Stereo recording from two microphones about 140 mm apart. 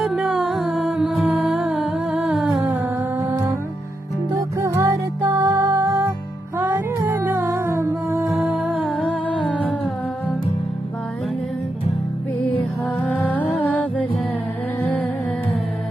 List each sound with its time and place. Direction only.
0.0 s music: 5° right (ahead or behind)
2.7 s music: 15° right (ahead or behind)
8.3 s music: centre (ahead or behind)
12.8 s music: 10° left (ahead or behind)